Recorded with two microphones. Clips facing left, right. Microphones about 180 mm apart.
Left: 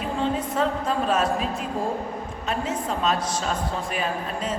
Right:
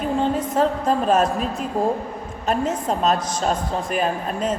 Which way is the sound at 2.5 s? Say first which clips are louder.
Right 6 dB; 45° right (ahead or behind).